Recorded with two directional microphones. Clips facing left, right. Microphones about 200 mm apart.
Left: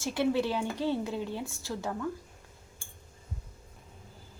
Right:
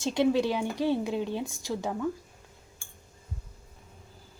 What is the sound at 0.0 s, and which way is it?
A woman's voice, 15° right (ahead or behind).